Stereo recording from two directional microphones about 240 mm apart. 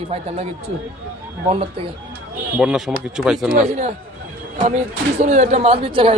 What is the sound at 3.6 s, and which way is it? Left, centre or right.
Speech, right.